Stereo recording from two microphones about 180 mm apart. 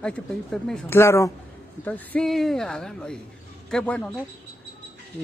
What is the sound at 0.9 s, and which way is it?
Speech, 15° left (ahead or behind).